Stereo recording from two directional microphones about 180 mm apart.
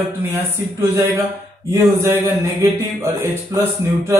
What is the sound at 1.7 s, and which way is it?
Speech, 15° right (ahead or behind).